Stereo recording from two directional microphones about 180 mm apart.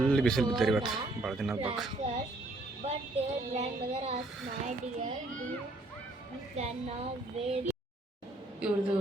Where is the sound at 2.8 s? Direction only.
40° right (ahead or behind).